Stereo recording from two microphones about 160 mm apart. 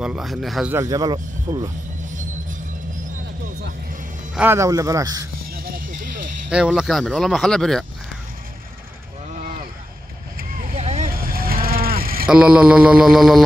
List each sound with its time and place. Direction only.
0.0 s speech: 5° right (ahead or behind)
0.7 s speech: 20° right (ahead or behind)
4.4 s speech: 15° right (ahead or behind)
5.5 s music: 65° right (ahead or behind)
6.5 s speech: 5° right (ahead or behind)
10.6 s vehicle: 45° right (ahead or behind)
11.1 s vehicle: 65° right (ahead or behind)
12.3 s mantra: 5° right (ahead or behind)